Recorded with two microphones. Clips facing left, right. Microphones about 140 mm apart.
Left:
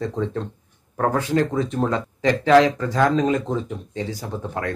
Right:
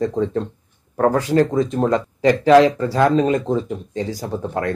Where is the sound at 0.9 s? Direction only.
35° right (ahead or behind).